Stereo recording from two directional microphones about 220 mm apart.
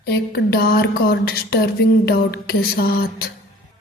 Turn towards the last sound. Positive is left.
turn(degrees=45)  # may be behind; listen again after turning